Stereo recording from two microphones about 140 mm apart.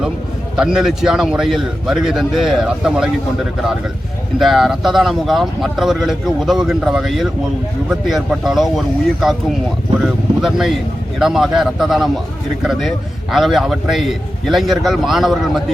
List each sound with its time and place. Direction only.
0.5 s speech: 5° right (ahead or behind)
4.4 s speech: centre (ahead or behind)
10.0 s speech: centre (ahead or behind)